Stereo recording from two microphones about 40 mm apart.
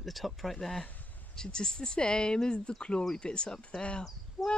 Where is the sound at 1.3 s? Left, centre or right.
Centre.